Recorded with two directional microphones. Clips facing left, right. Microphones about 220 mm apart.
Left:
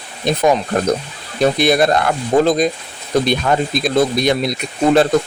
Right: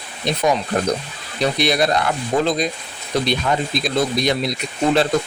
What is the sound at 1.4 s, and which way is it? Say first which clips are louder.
Speech: left 5 dB; 50° left (ahead or behind).